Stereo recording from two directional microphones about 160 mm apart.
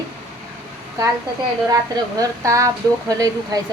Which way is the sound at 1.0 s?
20° right (ahead or behind).